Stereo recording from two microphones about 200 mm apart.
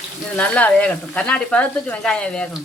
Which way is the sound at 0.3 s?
5° left (ahead or behind).